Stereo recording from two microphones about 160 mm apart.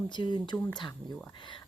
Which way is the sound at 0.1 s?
30° left (ahead or behind).